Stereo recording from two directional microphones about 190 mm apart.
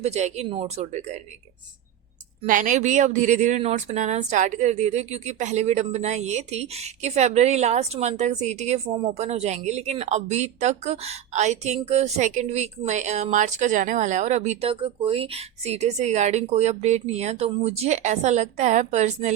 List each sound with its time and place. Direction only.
0.0 s a woman's voice: 35° right (ahead or behind)
2.5 s a woman's voice: 45° right (ahead or behind)